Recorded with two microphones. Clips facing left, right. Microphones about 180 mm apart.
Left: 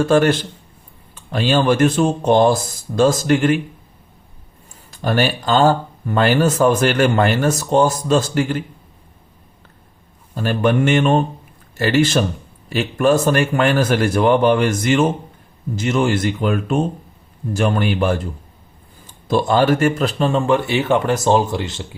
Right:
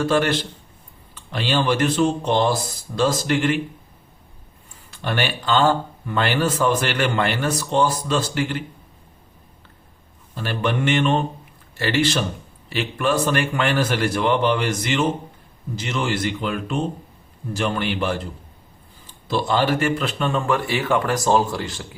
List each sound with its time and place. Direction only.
0.0 s speech: 45° left (ahead or behind)
4.9 s speech: 40° left (ahead or behind)
10.3 s speech: 45° left (ahead or behind); by 21.8 s 20° left (ahead or behind)